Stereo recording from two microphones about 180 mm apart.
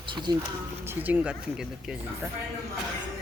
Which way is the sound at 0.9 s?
10° right (ahead or behind).